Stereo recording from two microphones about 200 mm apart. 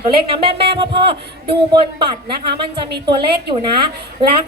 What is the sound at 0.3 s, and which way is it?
Speech, 25° right (ahead or behind).